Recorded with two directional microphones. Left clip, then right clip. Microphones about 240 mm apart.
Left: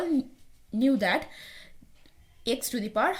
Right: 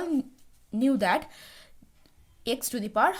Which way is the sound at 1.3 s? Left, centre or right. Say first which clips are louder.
Left 3 dB; right.